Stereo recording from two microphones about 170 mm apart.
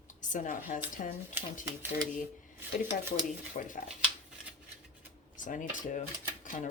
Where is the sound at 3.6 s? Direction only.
50° left (ahead or behind).